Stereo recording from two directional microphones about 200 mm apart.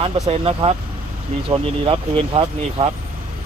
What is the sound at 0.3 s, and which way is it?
Speech, 30° right (ahead or behind).